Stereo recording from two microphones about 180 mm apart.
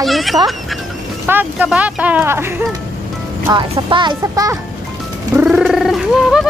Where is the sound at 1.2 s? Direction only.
10° right (ahead or behind).